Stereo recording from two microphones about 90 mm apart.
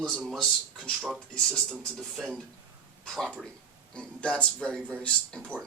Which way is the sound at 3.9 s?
10° left (ahead or behind).